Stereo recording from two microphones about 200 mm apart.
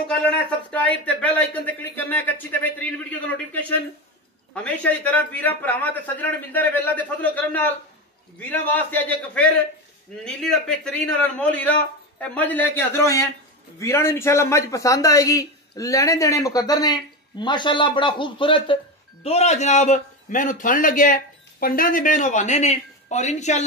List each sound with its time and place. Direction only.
0.3 s a man's voice: 5° left (ahead or behind); by 23.6 s 35° left (ahead or behind)